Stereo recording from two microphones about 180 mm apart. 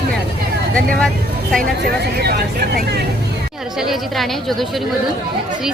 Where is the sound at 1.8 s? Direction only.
65° right (ahead or behind).